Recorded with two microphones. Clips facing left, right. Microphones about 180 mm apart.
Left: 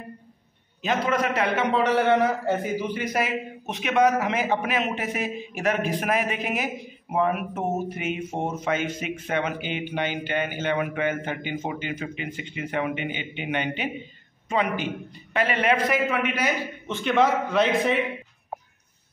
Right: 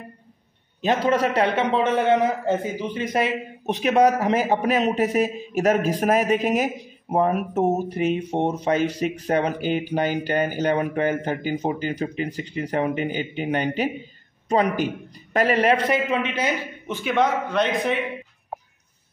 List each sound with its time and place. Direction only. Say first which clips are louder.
0.8 s a man's voice: right 4 dB; 35° right (ahead or behind); by 17.0 s 20° right (ahead or behind)
17.0 s a man's voice: even; centre (ahead or behind)